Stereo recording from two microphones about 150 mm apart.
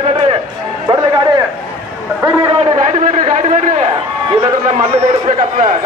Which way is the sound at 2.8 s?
55° right (ahead or behind).